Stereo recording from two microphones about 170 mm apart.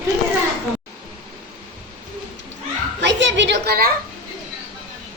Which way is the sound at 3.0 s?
90° right.